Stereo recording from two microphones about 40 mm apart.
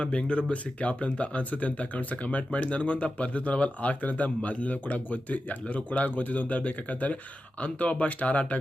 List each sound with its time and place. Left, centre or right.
0.0 s speech: left